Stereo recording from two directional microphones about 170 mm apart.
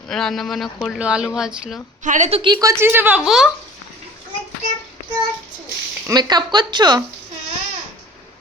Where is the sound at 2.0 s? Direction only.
45° right (ahead or behind).